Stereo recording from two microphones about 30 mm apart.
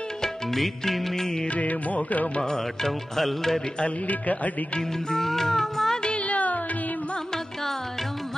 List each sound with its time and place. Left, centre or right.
0.6 s music: centre
1.6 s music: left
2.5 s music: centre
5.1 s music: centre
6.2 s music: left